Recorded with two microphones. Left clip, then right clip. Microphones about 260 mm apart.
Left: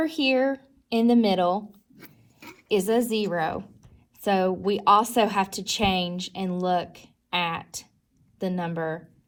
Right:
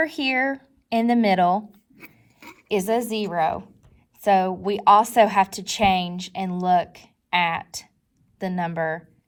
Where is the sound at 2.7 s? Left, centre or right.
Right.